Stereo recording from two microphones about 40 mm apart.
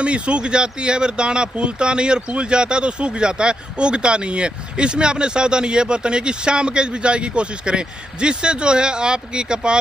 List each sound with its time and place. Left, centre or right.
0.0 s speech: right